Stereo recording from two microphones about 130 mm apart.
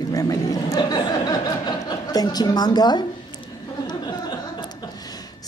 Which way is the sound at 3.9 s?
35° left (ahead or behind).